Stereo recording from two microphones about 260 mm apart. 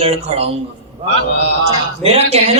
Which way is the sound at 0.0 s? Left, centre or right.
Right.